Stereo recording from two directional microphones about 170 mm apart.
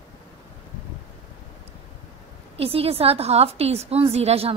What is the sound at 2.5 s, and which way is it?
A woman's voice, 35° right (ahead or behind).